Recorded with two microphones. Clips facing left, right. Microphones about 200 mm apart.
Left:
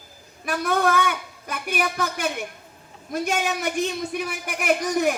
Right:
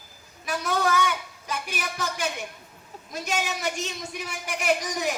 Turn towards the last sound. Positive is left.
turn(degrees=55)  # may be behind; listen again after turning